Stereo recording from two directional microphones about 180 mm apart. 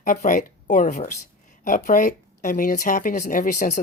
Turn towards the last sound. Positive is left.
turn(degrees=45)  # may be behind; listen again after turning